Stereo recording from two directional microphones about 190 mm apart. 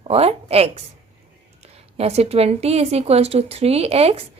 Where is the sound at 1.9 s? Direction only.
35° right (ahead or behind).